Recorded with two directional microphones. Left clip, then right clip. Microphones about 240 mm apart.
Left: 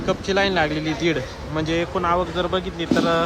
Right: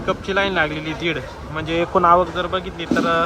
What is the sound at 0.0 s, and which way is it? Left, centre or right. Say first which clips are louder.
Speech: even; centre.